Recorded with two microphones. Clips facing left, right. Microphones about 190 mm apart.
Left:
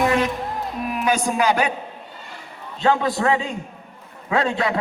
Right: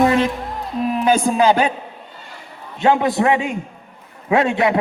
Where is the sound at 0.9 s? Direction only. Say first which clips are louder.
Right 5 dB; 30° right (ahead or behind).